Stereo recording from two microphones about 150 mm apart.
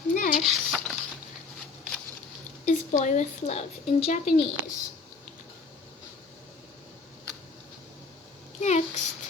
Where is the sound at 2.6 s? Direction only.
50° left (ahead or behind).